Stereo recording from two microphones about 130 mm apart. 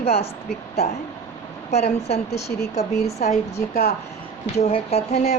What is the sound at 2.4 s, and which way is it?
Speech, 25° left (ahead or behind).